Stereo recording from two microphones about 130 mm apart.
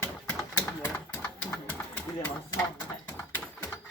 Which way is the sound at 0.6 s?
15° left (ahead or behind).